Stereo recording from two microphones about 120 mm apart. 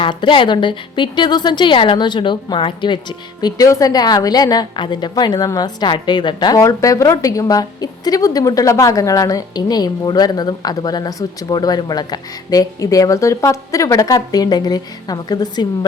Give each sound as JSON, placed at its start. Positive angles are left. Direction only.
{"t": 0.0, "sound": "a woman's voice", "side_deg": 40}
{"t": 3.4, "sound": "a woman's voice", "side_deg": 30}